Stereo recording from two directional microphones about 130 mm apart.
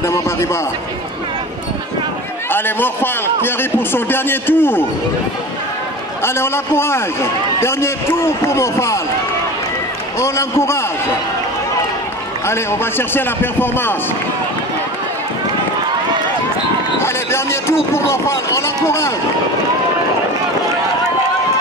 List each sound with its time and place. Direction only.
0.0 s a man's voice: 20° left (ahead or behind)
2.5 s speech: 15° left (ahead or behind)
6.2 s a man's voice: 20° left (ahead or behind)
10.1 s a man's voice: 20° left (ahead or behind)
12.4 s speech: 20° left (ahead or behind)
17.0 s a sound: 20° left (ahead or behind)
17.9 s a man's voice: 20° left (ahead or behind)